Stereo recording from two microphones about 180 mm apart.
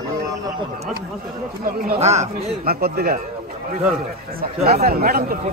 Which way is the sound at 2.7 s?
60° right (ahead or behind).